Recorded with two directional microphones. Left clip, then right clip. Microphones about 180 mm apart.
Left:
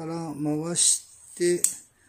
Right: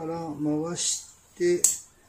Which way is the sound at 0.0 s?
55° left (ahead or behind).